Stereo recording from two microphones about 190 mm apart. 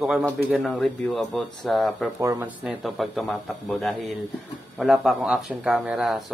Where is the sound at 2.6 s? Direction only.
Centre (ahead or behind).